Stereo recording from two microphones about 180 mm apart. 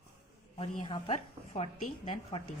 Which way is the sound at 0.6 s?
30° left (ahead or behind).